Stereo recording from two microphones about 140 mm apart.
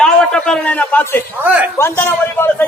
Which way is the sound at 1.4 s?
10° right (ahead or behind).